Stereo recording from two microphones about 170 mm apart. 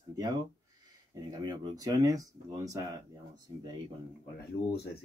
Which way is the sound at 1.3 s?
25° right (ahead or behind).